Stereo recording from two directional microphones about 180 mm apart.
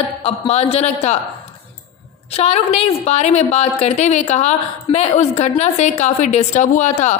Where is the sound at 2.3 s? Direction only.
35° left (ahead or behind).